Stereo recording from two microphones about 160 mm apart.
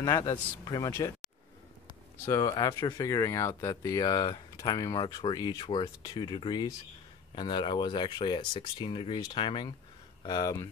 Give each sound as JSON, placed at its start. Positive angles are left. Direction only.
{"t": 0.0, "sound": "speech", "side_deg": 25}
{"t": 2.2, "sound": "speech", "side_deg": 25}